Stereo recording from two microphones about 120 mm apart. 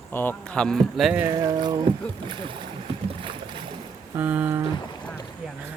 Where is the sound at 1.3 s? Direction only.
35° right (ahead or behind).